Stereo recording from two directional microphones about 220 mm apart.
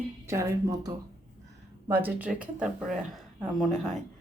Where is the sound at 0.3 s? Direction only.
15° right (ahead or behind).